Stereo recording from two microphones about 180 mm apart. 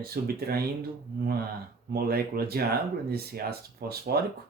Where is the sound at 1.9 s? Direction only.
60° right (ahead or behind).